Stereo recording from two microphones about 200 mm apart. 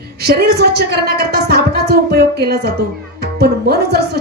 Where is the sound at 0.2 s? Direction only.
55° right (ahead or behind).